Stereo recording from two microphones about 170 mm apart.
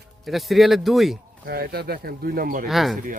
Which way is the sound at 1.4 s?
65° right (ahead or behind).